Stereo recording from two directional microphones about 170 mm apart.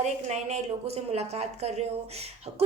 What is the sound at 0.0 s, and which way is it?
A woman's voice, 40° right (ahead or behind).